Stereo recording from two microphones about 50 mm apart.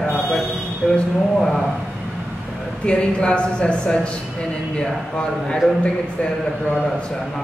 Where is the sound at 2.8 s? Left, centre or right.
Centre.